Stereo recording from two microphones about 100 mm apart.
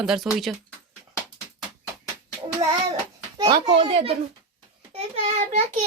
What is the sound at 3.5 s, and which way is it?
Speech, 55° right (ahead or behind).